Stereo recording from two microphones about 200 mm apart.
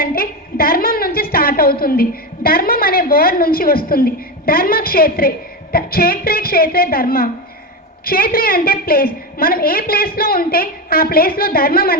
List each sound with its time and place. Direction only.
0.0 s a woman's voice: 50° left (ahead or behind)